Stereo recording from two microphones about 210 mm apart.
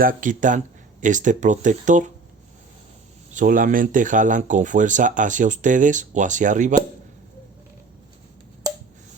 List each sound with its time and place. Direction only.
0.0 s speech: 40° right (ahead or behind)
3.3 s speech: 40° right (ahead or behind)